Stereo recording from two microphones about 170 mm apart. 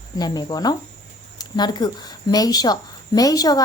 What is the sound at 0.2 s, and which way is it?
A woman's voice, 25° left (ahead or behind).